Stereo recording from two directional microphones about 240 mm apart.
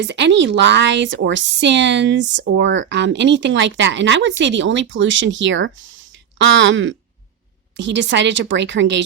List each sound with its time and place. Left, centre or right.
0.0 s a woman's voice: right